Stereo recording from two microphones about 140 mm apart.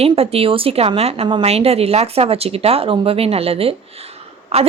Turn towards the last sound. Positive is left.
turn(degrees=-45)  # may be behind; listen again after turning